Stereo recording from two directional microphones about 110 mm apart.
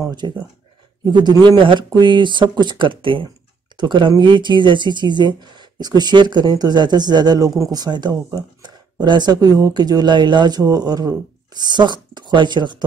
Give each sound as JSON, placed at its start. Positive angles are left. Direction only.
{"t": 0.2, "sound": "speech", "side_deg": -45}